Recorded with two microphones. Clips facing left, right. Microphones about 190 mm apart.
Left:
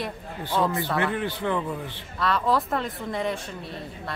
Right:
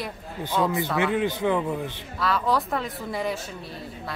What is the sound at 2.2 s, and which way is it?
Speech, centre (ahead or behind).